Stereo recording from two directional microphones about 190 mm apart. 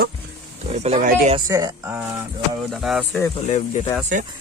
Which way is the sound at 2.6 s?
Centre (ahead or behind).